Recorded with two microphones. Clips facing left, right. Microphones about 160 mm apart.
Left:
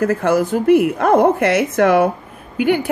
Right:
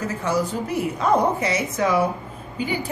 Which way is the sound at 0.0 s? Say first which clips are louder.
Left 8 dB; 55° left (ahead or behind).